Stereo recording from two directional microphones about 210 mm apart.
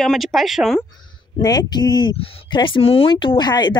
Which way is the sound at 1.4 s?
20° left (ahead or behind).